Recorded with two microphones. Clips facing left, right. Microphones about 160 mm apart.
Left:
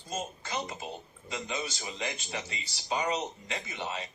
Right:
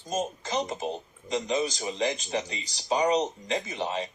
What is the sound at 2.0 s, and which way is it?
A man's voice, 40° right (ahead or behind).